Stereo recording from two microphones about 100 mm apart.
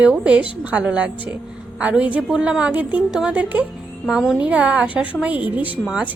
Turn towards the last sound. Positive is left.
turn(degrees=-15)  # may be behind; listen again after turning